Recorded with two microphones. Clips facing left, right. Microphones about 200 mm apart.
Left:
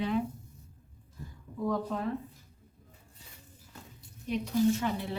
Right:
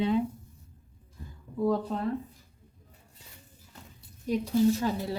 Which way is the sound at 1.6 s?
35° right (ahead or behind).